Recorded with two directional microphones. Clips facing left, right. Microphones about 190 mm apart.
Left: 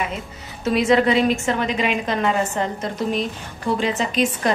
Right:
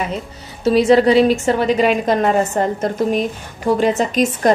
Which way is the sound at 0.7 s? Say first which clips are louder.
Right 5 dB; 35° right (ahead or behind).